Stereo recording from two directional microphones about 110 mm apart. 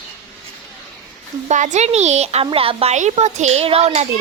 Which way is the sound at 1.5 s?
90° right.